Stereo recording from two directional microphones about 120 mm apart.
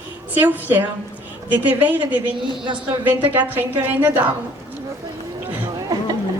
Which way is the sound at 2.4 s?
40° right (ahead or behind).